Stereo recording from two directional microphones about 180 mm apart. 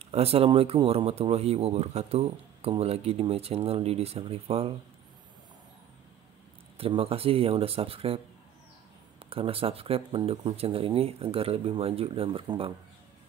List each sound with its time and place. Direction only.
0.0 s speech: 35° right (ahead or behind)
6.8 s speech: 30° right (ahead or behind)
9.2 s speech: 30° right (ahead or behind)